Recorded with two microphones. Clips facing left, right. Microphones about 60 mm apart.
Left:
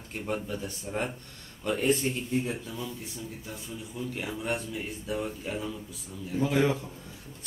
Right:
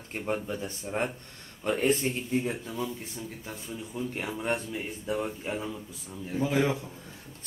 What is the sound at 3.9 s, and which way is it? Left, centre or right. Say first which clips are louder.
Speech: right 1 dB; right.